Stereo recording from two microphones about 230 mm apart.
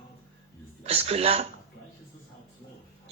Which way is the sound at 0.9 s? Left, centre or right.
Right.